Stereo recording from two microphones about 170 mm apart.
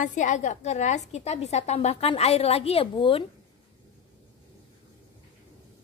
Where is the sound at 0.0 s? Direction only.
45° left (ahead or behind); by 3.3 s 30° left (ahead or behind).